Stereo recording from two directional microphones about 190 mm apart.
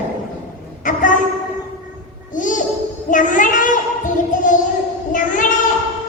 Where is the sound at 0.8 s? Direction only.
40° left (ahead or behind).